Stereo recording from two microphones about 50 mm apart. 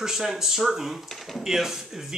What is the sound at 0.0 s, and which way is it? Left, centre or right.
Speech, centre.